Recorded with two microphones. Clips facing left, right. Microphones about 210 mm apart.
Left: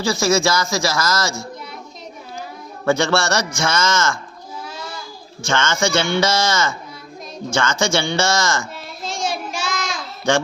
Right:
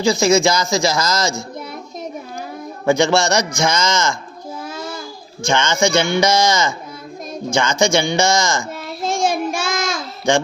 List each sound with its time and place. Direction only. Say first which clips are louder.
0.0 s a man's voice: right 4 dB; 20° right (ahead or behind)
2.8 s a man's voice: right 3 dB; 15° right (ahead or behind)
5.5 s a man's voice: right 3 dB; 15° right (ahead or behind)
8.7 s child singing: right 7 dB; 50° right (ahead or behind)